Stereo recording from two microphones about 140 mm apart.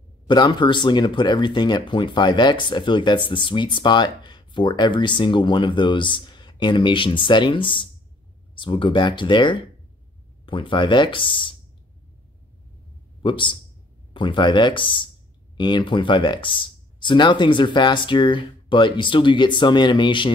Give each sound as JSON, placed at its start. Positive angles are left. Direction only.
{"t": 0.3, "sound": "speech", "side_deg": 35}
{"t": 13.2, "sound": "speech", "side_deg": 35}